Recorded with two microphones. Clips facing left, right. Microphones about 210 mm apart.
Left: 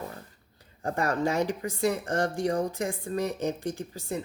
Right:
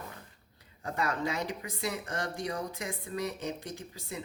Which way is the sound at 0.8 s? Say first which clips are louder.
Left 5 dB; 50° left (ahead or behind).